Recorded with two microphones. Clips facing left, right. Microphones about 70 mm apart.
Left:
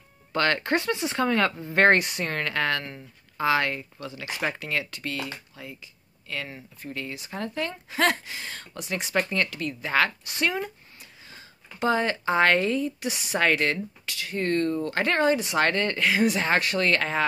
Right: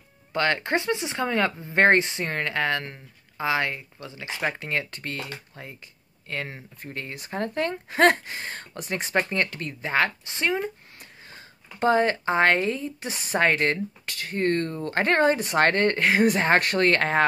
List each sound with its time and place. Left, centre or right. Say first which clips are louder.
0.3 s speech: even; centre
4.6 s a woman's voice: right 1 dB; right
11.8 s a woman's voice: right 3 dB; right